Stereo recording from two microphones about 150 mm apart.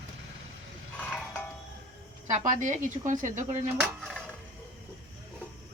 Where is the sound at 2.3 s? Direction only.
60° right (ahead or behind).